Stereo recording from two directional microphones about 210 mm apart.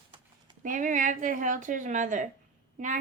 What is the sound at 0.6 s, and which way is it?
Speech, 40° right (ahead or behind).